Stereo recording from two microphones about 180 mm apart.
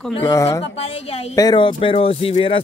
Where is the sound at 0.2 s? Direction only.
15° left (ahead or behind).